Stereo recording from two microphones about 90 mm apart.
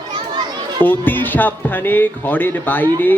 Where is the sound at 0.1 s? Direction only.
55° right (ahead or behind).